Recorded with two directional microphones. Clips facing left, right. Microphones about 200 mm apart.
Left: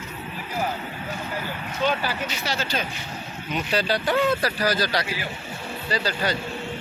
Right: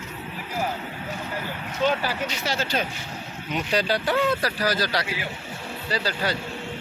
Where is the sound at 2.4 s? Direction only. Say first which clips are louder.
Right 2 dB; 50° right (ahead or behind).